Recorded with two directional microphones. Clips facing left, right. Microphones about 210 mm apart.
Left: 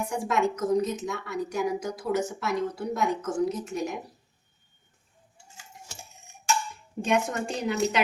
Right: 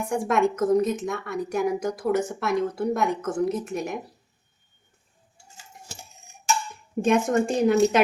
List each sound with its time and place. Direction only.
0.1 s a woman's voice: 55° right (ahead or behind)
7.0 s speech: 50° right (ahead or behind)